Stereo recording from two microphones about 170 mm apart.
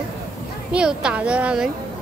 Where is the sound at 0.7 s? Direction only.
5° right (ahead or behind).